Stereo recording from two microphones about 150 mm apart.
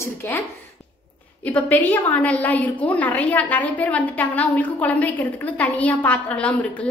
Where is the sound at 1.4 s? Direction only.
10° left (ahead or behind).